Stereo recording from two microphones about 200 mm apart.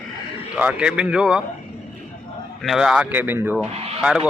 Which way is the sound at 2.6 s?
Centre (ahead or behind).